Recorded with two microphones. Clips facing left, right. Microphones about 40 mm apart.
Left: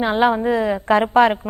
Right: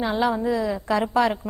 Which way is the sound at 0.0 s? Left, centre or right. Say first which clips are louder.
Left 5 dB; left.